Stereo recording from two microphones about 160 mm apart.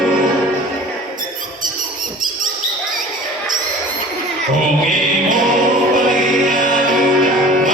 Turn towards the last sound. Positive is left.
turn(degrees=-55)  # may be behind; listen again after turning